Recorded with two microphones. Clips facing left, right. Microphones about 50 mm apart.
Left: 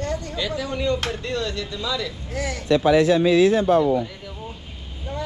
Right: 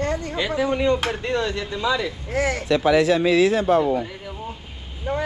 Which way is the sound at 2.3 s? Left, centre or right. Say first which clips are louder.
Right 1 dB; right.